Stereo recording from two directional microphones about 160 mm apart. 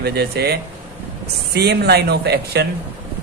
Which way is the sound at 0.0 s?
85° right.